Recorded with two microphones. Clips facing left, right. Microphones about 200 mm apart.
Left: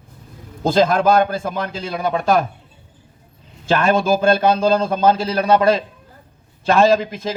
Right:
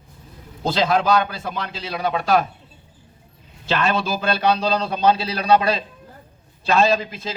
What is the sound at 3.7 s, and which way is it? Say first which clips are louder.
A man's voice: left 6 dB; 50° left (ahead or behind).